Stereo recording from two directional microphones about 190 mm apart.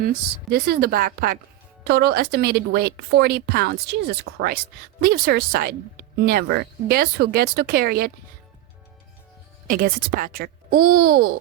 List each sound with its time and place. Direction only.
0.0 s a woman's voice: 50° right (ahead or behind)
9.6 s speech: 45° right (ahead or behind)